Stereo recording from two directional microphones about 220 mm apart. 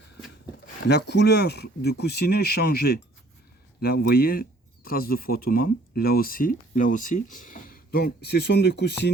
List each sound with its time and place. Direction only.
0.9 s speech: 50° left (ahead or behind)